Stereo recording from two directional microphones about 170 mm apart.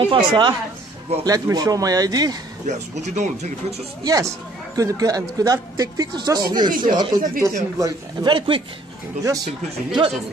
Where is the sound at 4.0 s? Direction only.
20° right (ahead or behind).